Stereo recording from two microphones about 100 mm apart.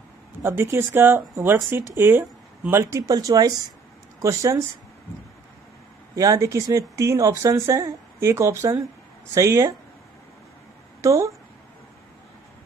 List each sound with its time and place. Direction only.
0.4 s speech: 25° right (ahead or behind)
6.1 s speech: 35° right (ahead or behind)
11.0 s a woman's voice: 30° right (ahead or behind)